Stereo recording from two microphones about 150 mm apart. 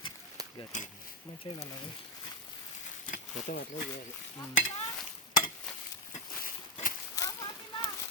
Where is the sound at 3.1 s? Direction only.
70° left (ahead or behind).